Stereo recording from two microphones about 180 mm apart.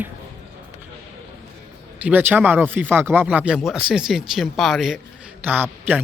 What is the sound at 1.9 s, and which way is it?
Speech, 10° right (ahead or behind).